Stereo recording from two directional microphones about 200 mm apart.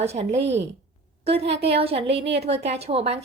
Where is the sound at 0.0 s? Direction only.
30° right (ahead or behind).